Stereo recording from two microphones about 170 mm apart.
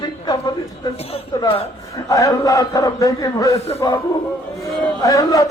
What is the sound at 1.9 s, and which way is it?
Speech, 20° left (ahead or behind).